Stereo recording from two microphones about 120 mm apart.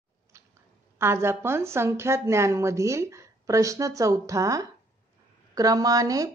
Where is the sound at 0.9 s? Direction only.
20° right (ahead or behind).